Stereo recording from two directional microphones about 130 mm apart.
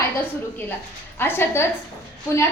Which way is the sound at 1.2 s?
15° left (ahead or behind).